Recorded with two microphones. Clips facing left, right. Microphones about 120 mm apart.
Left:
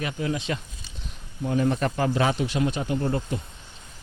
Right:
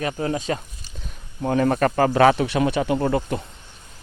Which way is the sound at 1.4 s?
65° right (ahead or behind).